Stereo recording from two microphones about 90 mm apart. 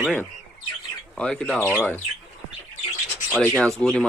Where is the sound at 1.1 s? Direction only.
10° left (ahead or behind).